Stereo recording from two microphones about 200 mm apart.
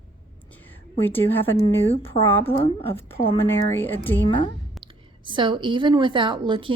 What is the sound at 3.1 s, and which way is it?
A woman's voice, 10° left (ahead or behind).